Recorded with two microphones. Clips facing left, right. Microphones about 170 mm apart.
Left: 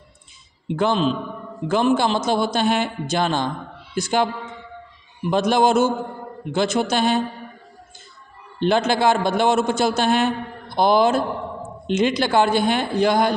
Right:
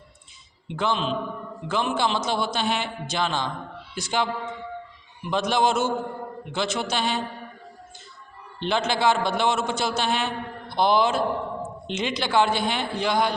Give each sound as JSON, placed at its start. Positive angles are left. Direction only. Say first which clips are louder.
{"t": 0.7, "sound": "a man's voice", "louder": "left 6 dB", "side_deg": 45}
{"t": 5.3, "sound": "a man's voice", "louder": "left 5 dB", "side_deg": 50}
{"t": 8.5, "sound": "a man's voice", "louder": "left 6 dB", "side_deg": 50}